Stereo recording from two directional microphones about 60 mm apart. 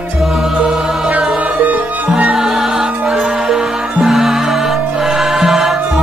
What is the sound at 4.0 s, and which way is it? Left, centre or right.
Music, centre.